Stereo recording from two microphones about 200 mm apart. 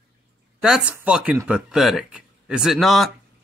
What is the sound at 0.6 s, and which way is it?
Speech, 5° right (ahead or behind).